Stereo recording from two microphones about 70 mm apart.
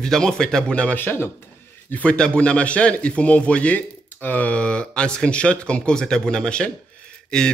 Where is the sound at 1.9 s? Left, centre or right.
Centre.